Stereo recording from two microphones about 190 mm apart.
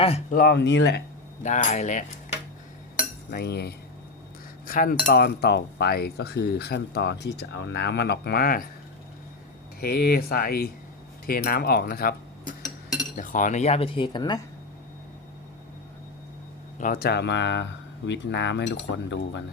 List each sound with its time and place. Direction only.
0.0 s speech: 30° left (ahead or behind)
0.3 s cutlery: 60° left (ahead or behind)
1.5 s cutlery: 40° left (ahead or behind)
3.2 s cutlery: 55° left (ahead or behind)
9.8 s speech: 55° left (ahead or behind); by 14.4 s 20° left (ahead or behind)
16.7 s speech: 50° left (ahead or behind); by 19.4 s 70° left (ahead or behind)